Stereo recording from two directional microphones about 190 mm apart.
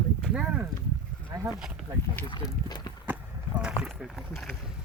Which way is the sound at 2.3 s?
20° left (ahead or behind).